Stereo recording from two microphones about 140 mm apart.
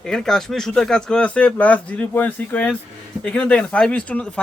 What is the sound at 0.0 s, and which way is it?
Speech, 5° left (ahead or behind).